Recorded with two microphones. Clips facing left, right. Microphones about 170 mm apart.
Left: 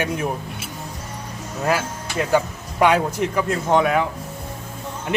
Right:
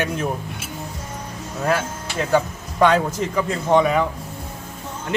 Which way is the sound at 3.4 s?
5° left (ahead or behind).